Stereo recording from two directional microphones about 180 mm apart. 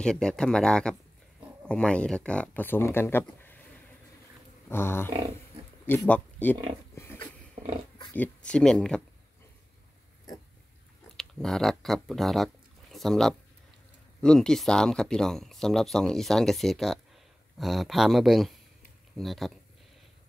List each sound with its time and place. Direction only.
0.0 s speech: 5° left (ahead or behind)
4.6 s a sound: 15° left (ahead or behind)
5.9 s speech: 10° left (ahead or behind)
11.1 s chewing: centre (ahead or behind)
11.8 s speech: centre (ahead or behind)